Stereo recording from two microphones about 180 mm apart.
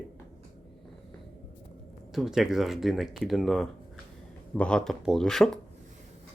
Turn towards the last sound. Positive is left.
turn(degrees=0)  # may be behind; listen again after turning